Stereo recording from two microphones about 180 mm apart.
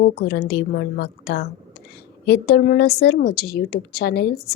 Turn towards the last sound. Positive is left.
turn(degrees=60)  # may be behind; listen again after turning